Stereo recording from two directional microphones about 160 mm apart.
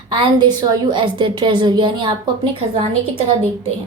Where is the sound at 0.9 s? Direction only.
30° right (ahead or behind).